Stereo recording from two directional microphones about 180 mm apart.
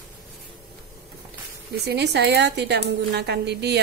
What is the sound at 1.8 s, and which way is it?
A woman's voice, 65° right (ahead or behind).